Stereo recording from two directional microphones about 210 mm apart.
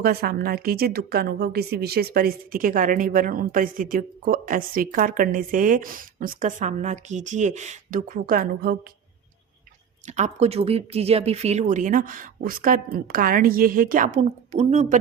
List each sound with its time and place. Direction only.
0.0 s a woman's voice: 45° right (ahead or behind)
10.1 s a woman's voice: 35° right (ahead or behind)
14.2 s a woman's voice: 30° right (ahead or behind)